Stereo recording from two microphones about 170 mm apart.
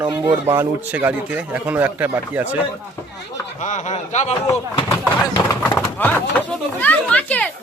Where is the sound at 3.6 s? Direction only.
45° left (ahead or behind).